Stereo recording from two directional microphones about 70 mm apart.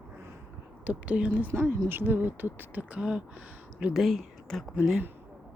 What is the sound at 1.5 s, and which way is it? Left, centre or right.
Speech, right.